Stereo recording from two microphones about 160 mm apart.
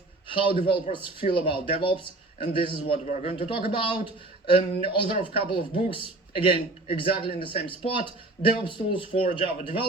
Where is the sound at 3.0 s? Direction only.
45° left (ahead or behind).